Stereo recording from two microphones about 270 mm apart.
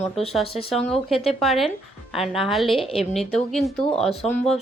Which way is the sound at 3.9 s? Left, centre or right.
Left.